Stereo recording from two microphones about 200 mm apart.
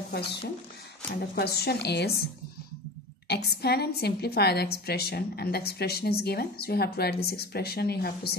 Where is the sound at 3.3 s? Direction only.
55° left (ahead or behind).